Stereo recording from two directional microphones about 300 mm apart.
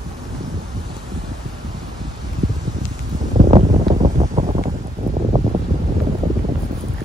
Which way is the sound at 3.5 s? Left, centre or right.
Right.